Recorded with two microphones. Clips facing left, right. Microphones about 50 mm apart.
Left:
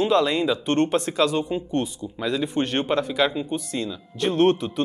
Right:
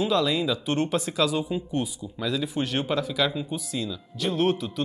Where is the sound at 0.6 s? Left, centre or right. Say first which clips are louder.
Left 4 dB; left.